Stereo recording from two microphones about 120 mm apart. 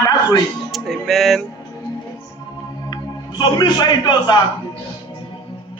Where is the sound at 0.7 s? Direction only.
Centre (ahead or behind).